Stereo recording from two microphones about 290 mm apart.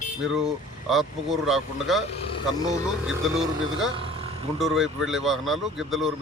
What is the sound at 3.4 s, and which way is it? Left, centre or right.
Speech, right.